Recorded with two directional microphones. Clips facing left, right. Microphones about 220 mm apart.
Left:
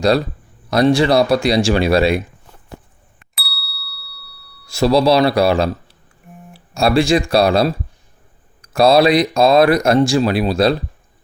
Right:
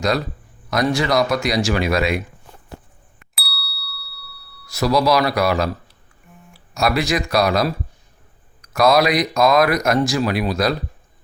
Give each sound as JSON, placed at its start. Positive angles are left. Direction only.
{"t": 0.7, "sound": "speech", "side_deg": 30}
{"t": 3.3, "sound": "ding", "side_deg": 0}
{"t": 4.6, "sound": "speech", "side_deg": 30}